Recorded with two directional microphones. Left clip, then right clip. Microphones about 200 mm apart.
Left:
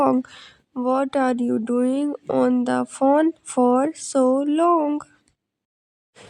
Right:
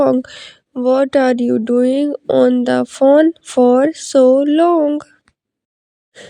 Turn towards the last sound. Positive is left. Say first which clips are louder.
# right 6 dB
turn(degrees=-25)  # may be behind; listen again after turning